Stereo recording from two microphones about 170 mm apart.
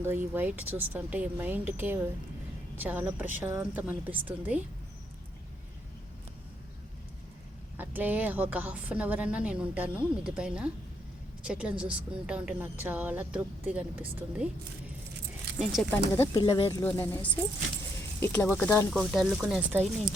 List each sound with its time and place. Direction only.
0.0 s a woman's voice: 10° right (ahead or behind)
7.8 s a woman's voice: 10° right (ahead or behind)
15.7 s speech: 10° left (ahead or behind)
16.3 s speech: 25° left (ahead or behind)
16.8 s speech: 15° left (ahead or behind)
19.1 s speech: centre (ahead or behind)